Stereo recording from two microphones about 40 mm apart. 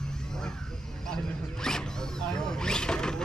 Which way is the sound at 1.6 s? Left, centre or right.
Centre.